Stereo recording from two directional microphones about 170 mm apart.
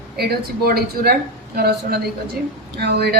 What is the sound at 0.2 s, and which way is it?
A woman's voice, 65° right (ahead or behind).